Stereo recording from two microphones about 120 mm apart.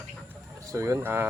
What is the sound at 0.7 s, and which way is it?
Speech, 25° right (ahead or behind).